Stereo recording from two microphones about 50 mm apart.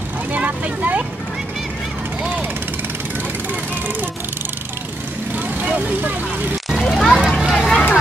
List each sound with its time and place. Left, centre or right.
0.3 s speech: right
5.7 s speech: right
6.7 s children playing: centre
7.2 s a sound: centre